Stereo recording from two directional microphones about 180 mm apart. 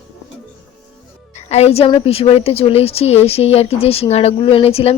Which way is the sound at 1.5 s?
35° left (ahead or behind).